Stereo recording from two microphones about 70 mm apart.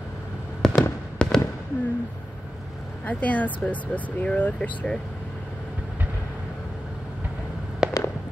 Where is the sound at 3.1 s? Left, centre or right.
Left.